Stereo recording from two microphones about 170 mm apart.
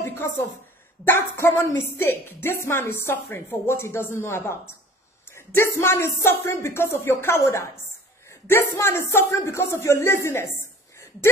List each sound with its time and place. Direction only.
1.0 s a woman's voice: 15° left (ahead or behind)